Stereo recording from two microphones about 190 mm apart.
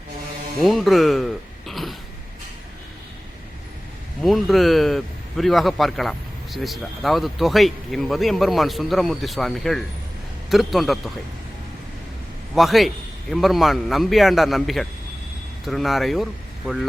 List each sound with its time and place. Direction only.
0.6 s speech: centre (ahead or behind)
4.2 s speech: centre (ahead or behind)
12.5 s speech: centre (ahead or behind)